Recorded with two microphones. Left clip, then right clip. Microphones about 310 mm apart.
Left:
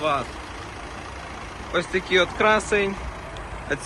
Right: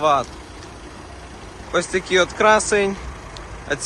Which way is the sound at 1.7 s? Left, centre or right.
Centre.